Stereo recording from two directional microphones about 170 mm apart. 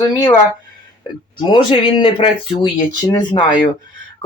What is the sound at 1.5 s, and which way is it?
Speech, 30° left (ahead or behind).